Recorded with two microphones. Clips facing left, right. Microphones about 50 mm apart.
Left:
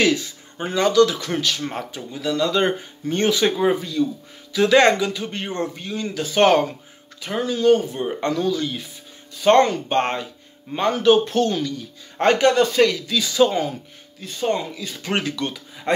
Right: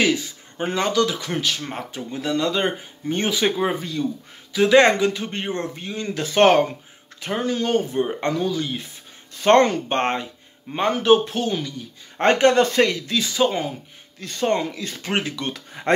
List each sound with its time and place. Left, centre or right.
0.1 s speech: right
2.5 s speech: centre
4.0 s speech: right
6.1 s speech: right
7.4 s speech: right
9.3 s speech: right; by 11.7 s centre
12.2 s speech: right
14.4 s speech: right
15.0 s speech: right
15.5 s speech: right